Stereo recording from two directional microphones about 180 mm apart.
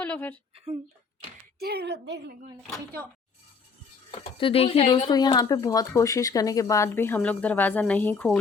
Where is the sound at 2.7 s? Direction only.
10° left (ahead or behind).